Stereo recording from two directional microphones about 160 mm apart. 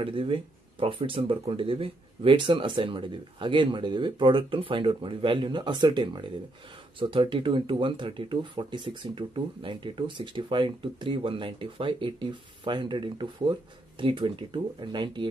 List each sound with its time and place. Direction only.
0.0 s speech: 35° right (ahead or behind)